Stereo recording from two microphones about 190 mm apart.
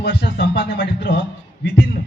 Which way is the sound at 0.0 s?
60° left (ahead or behind).